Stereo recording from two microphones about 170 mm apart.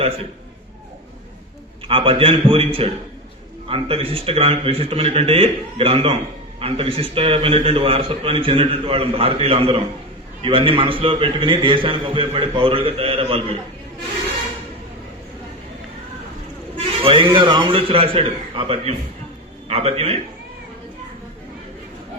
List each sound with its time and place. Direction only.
1.9 s a man's voice: 30° right (ahead or behind)
16.7 s a man's voice: 30° right (ahead or behind)